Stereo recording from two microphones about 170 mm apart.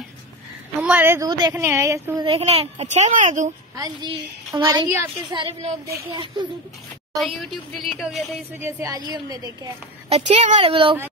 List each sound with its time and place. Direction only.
0.7 s a woman's voice: 10° right (ahead or behind)
2.2 s speech: 35° right (ahead or behind)
3.7 s a woman's voice: 25° right (ahead or behind)
5.3 s a woman's voice: 25° right (ahead or behind)
7.2 s music: centre (ahead or behind)
8.5 s a woman's voice: 15° right (ahead or behind)
10.0 s a woman's voice: 35° right (ahead or behind)